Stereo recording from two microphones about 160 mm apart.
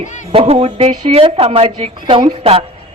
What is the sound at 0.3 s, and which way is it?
A woman's voice, 35° right (ahead or behind).